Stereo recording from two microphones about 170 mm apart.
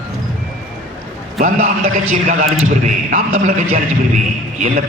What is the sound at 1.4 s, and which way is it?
A man's voice, 50° right (ahead or behind).